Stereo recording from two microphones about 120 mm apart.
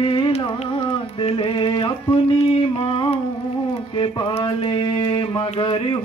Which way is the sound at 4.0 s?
50° left (ahead or behind).